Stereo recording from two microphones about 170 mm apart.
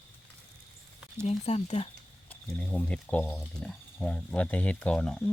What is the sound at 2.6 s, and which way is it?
Speech, 5° left (ahead or behind).